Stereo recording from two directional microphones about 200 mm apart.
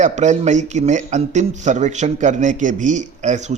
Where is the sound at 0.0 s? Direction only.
35° right (ahead or behind).